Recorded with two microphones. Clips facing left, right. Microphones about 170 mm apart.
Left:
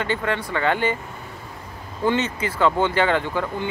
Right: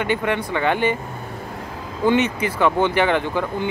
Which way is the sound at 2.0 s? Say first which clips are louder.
Right 4 dB; 15° right (ahead or behind).